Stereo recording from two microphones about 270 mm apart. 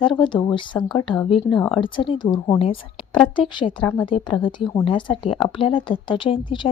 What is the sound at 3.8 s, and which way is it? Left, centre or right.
A woman's voice, centre.